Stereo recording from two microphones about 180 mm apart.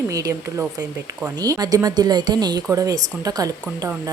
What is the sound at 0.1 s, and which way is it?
A woman's voice, 20° right (ahead or behind).